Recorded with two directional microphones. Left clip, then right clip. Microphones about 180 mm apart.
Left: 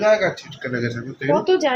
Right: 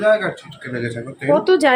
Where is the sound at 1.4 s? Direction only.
30° right (ahead or behind).